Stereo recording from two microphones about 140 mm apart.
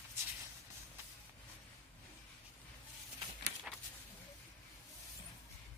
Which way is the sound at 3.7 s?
5° right (ahead or behind).